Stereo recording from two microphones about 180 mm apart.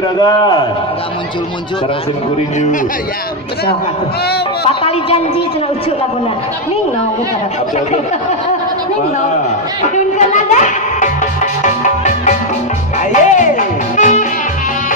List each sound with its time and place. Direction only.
0.2 s a man's voice: 25° left (ahead or behind)
4.6 s a man's voice: 30° left (ahead or behind)
9.9 s speech: 45° left (ahead or behind)
11.6 s music: 45° left (ahead or behind)